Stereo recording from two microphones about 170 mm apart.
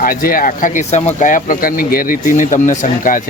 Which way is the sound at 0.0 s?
55° left (ahead or behind).